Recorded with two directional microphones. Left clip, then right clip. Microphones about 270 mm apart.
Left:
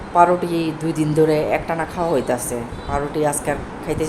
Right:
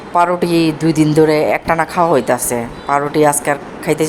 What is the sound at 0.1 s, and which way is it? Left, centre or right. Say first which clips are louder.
A woman's voice: right 2 dB; centre.